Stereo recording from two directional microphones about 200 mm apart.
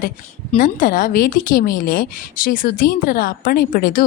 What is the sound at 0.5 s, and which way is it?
Speech, 40° left (ahead or behind).